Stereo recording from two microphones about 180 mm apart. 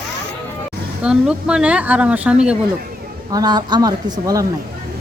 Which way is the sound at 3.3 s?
20° right (ahead or behind).